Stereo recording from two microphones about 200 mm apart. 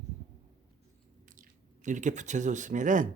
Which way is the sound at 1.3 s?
40° right (ahead or behind).